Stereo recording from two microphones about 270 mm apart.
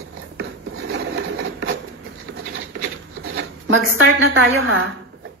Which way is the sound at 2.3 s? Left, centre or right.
Right.